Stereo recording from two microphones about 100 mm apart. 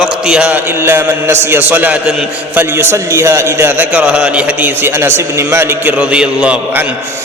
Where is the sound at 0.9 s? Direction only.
25° right (ahead or behind).